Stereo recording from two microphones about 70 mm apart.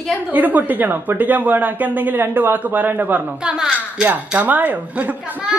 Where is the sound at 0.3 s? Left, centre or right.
Right.